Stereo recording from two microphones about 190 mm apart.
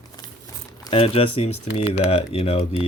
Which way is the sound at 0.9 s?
30° left (ahead or behind).